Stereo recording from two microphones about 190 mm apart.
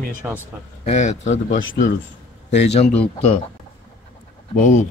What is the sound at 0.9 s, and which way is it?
Speech, 35° left (ahead or behind).